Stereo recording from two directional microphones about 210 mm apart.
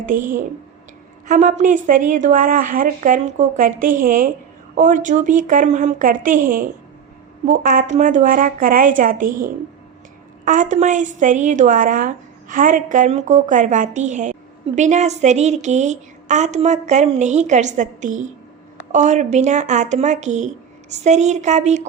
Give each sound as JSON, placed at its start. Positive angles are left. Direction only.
{"t": 1.3, "sound": "a woman's voice", "side_deg": -35}